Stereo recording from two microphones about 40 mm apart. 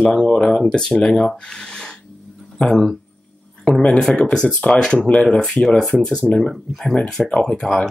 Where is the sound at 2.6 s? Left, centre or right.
Centre.